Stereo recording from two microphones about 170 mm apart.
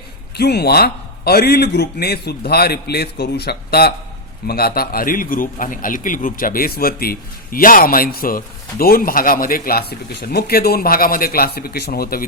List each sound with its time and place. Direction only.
0.3 s a man's voice: 70° left (ahead or behind)